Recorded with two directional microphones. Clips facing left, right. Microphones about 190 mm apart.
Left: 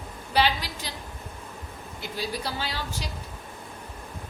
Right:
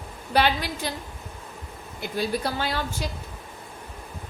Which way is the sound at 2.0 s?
50° right (ahead or behind).